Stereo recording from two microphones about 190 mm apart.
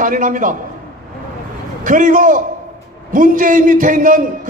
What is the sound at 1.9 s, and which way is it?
A man's voice, 45° right (ahead or behind).